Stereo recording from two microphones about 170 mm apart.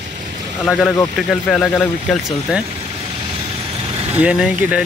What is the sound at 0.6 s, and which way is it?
Speech, 5° left (ahead or behind).